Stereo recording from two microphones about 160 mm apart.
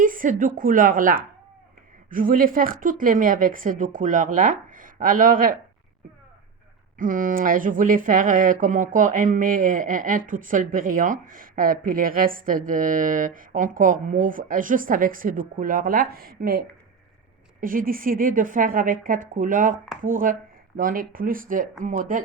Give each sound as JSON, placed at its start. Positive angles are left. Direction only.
{"t": 0.0, "sound": "speech", "side_deg": -55}
{"t": 7.0, "sound": "speech", "side_deg": -55}